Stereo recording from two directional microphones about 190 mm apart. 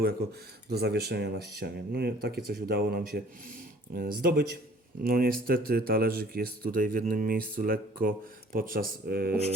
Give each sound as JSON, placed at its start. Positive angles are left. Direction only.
{"t": 0.7, "sound": "speech", "side_deg": -55}